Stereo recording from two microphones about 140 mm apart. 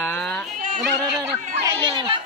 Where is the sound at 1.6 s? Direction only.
35° right (ahead or behind).